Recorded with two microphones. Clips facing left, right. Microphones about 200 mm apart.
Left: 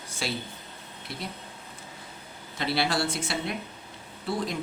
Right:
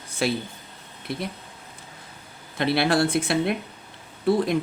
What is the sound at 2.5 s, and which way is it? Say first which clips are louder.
Speech: right 6 dB; 55° right (ahead or behind).